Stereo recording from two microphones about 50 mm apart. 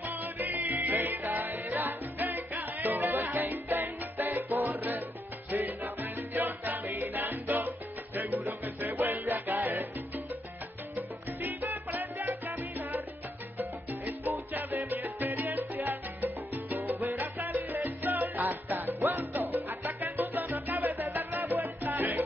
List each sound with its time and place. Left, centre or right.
0.0 s music: right
9.3 s salsa music: right
12.0 s salsa music: right
12.4 s salsa music: right
14.5 s music: right
14.9 s salsa music: right